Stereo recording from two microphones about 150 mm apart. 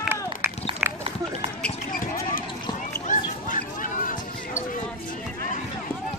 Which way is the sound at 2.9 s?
65° left (ahead or behind).